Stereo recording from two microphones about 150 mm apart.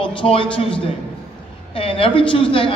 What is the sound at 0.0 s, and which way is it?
A man's voice, 35° left (ahead or behind).